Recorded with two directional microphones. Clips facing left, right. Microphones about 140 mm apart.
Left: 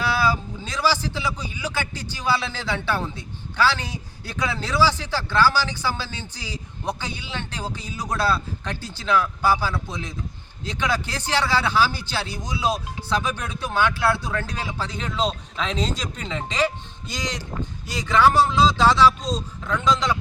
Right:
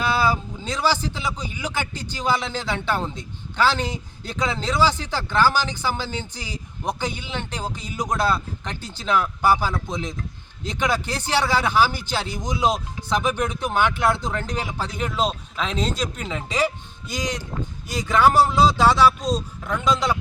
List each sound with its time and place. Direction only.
0.0 s a man's voice: 15° right (ahead or behind)